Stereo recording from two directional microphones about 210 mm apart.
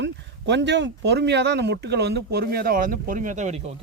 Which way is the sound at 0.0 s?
55° right (ahead or behind).